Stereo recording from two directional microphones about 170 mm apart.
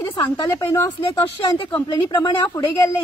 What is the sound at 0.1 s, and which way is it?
A woman's voice, 25° left (ahead or behind).